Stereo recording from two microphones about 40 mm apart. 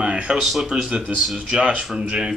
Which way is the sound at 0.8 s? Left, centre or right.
Right.